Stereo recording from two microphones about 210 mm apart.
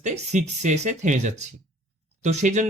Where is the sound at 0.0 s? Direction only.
35° right (ahead or behind).